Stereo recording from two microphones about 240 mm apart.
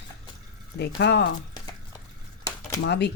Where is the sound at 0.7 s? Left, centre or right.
Left.